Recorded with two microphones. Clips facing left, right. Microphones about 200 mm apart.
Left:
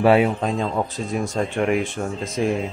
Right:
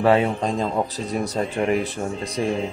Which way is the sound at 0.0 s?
10° left (ahead or behind).